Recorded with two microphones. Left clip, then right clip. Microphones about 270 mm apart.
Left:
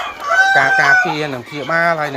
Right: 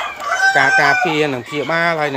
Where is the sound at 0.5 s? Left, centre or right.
Right.